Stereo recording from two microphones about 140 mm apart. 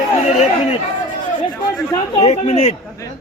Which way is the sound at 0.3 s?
45° left (ahead or behind).